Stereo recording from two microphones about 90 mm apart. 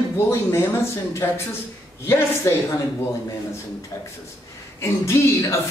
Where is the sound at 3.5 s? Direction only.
30° left (ahead or behind).